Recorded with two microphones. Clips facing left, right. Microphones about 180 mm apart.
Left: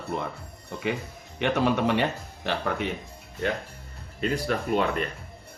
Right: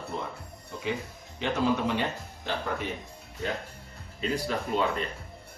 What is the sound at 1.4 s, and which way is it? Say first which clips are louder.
Speech: left 3 dB; 65° left (ahead or behind).